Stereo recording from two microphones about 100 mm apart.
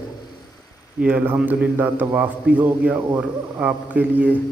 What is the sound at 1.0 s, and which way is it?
A man's voice, 20° right (ahead or behind).